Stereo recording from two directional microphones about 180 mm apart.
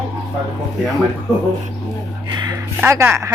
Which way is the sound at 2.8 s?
15° right (ahead or behind).